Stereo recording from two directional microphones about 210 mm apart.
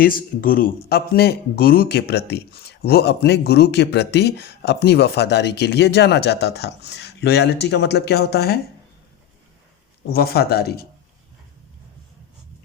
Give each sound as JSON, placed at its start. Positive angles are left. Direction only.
{"t": 0.0, "sound": "speech", "side_deg": 40}
{"t": 10.1, "sound": "speech", "side_deg": 50}